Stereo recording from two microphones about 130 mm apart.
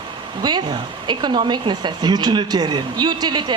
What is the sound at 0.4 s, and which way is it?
Speech, 35° right (ahead or behind).